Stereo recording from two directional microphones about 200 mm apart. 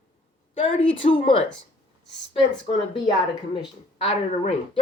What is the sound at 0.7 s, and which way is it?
Speech, 25° left (ahead or behind).